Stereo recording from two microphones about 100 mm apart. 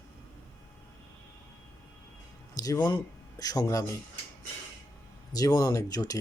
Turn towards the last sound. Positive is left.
turn(degrees=35)  # may be behind; listen again after turning